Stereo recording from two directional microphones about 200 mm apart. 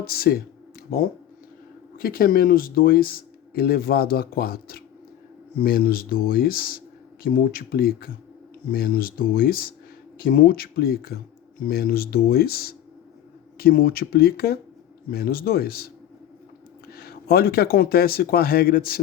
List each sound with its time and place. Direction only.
0.0 s speech: 50° left (ahead or behind)
16.9 s speech: 50° left (ahead or behind)